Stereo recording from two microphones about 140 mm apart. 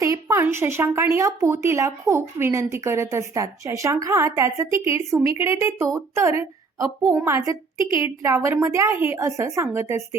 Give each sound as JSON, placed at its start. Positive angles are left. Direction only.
{"t": 0.0, "sound": "a woman's voice", "side_deg": -20}